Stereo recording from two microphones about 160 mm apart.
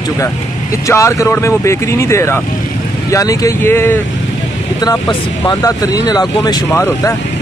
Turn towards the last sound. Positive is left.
turn(degrees=25)  # may be behind; listen again after turning